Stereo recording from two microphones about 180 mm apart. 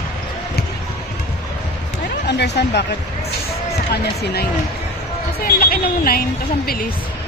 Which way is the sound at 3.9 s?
60° left (ahead or behind).